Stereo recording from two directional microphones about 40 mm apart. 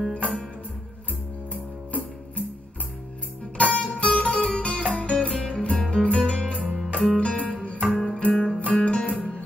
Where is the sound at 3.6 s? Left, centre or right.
Left.